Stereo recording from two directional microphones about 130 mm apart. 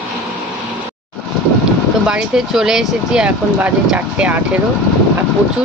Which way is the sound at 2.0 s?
5° right (ahead or behind).